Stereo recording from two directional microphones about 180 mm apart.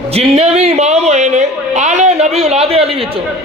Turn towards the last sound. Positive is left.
turn(degrees=-35)  # may be behind; listen again after turning